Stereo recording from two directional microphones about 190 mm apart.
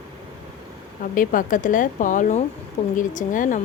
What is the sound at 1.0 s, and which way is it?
A woman's voice, 45° left (ahead or behind).